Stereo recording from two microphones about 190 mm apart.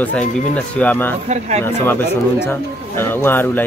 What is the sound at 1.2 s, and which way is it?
Speech, 35° right (ahead or behind).